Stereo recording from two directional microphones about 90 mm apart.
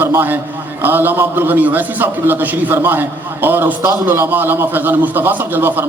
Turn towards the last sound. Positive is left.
turn(degrees=-20)  # may be behind; listen again after turning